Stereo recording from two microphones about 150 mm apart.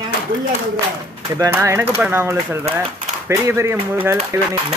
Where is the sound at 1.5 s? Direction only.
15° right (ahead or behind).